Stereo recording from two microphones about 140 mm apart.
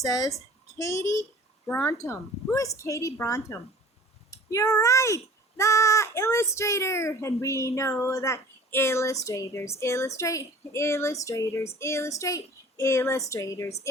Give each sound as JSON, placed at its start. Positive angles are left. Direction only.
{"t": 0.0, "sound": "a child's voice", "side_deg": 25}